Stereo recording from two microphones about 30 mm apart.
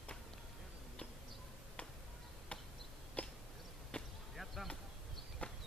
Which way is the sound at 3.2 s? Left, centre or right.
Left.